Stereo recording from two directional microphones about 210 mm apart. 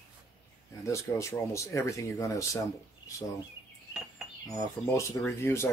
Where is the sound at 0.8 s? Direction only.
15° left (ahead or behind).